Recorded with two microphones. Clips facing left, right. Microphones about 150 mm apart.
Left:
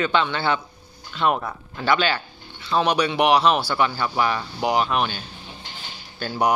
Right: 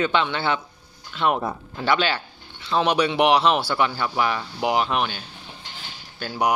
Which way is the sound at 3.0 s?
25° right (ahead or behind).